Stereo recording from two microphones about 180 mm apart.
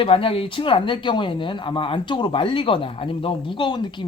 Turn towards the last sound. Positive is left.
turn(degrees=25)  # may be behind; listen again after turning